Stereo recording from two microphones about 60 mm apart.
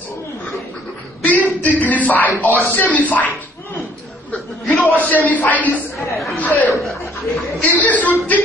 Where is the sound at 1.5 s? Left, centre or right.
Left.